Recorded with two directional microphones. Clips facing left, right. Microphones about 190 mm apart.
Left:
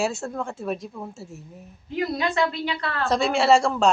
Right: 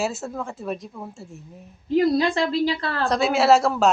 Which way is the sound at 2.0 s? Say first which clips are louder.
Right 4 dB; 30° right (ahead or behind).